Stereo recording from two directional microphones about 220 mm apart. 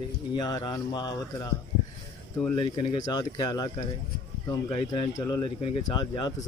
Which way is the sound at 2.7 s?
25° left (ahead or behind).